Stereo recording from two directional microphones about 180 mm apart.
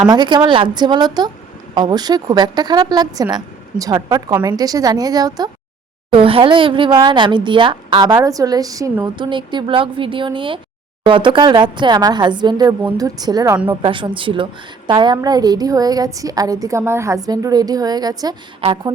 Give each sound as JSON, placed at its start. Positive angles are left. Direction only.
{"t": 0.1, "sound": "a woman's voice", "side_deg": -25}